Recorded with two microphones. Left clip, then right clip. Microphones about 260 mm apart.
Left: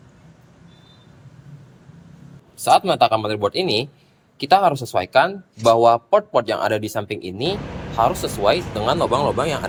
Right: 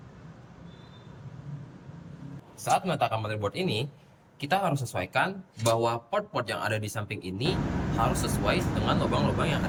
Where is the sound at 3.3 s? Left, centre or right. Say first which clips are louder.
Left 11 dB; centre.